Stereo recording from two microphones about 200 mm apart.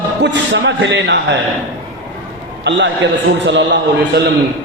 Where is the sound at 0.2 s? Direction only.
65° right (ahead or behind).